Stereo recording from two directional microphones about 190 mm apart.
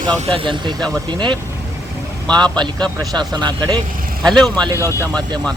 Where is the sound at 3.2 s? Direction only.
25° right (ahead or behind).